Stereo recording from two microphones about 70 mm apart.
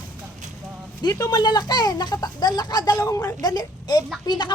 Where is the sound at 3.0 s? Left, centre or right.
Left.